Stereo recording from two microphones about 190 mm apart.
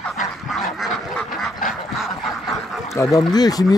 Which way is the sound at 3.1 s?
20° left (ahead or behind).